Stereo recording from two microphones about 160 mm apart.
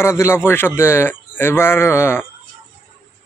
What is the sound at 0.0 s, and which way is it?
A man's voice, 15° left (ahead or behind).